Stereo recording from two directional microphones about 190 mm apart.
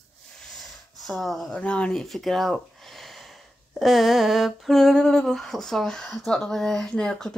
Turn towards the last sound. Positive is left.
turn(degrees=5)  # may be behind; listen again after turning